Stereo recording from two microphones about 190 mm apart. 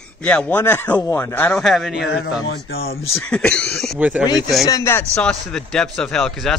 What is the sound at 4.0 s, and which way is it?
Speech, 10° right (ahead or behind).